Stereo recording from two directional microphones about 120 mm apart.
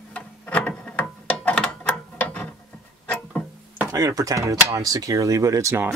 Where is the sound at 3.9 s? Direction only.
30° right (ahead or behind).